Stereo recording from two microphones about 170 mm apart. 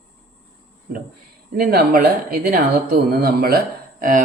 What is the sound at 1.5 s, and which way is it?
Speech, 65° right (ahead or behind).